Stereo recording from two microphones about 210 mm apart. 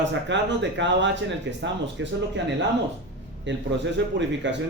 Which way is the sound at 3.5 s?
60° right (ahead or behind).